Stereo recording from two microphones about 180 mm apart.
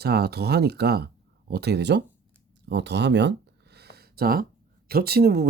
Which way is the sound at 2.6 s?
75° right (ahead or behind).